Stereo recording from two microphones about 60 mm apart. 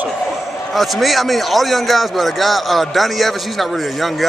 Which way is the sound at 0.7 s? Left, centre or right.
Centre.